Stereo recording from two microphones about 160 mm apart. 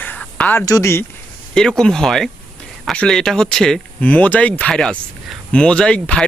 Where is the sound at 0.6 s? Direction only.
20° left (ahead or behind).